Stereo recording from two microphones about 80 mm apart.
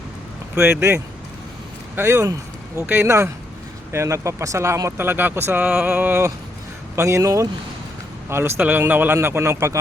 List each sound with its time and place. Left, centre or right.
0.5 s speech: right